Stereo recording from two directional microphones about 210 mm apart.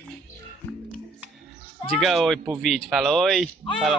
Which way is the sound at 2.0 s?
Centre (ahead or behind).